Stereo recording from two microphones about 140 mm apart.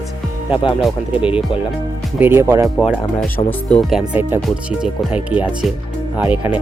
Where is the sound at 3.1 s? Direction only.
10° left (ahead or behind).